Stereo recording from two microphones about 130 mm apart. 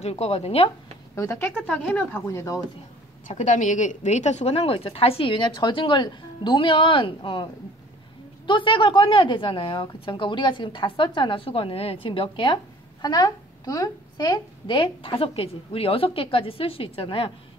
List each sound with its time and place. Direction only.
0.0 s a woman's voice: 55° left (ahead or behind)
1.1 s speech: 20° left (ahead or behind)
3.3 s a woman's voice: 70° left (ahead or behind); by 7.4 s 40° left (ahead or behind)
8.5 s a woman's voice: 40° left (ahead or behind)
13.0 s a woman's voice: 30° left (ahead or behind); by 17.3 s 45° left (ahead or behind)